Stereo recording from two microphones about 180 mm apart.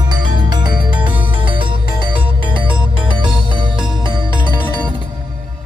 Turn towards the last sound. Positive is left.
turn(degrees=-25)  # may be behind; listen again after turning